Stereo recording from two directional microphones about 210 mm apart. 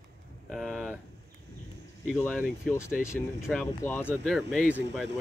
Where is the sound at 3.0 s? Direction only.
15° left (ahead or behind).